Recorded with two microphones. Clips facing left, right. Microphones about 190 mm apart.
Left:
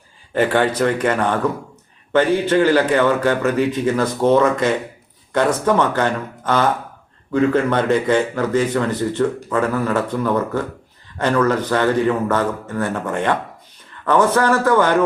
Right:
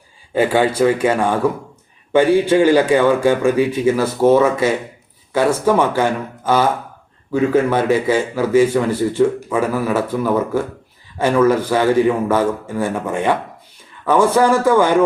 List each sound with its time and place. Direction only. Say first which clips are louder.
0.3 s speech: right 2 dB; 10° right (ahead or behind)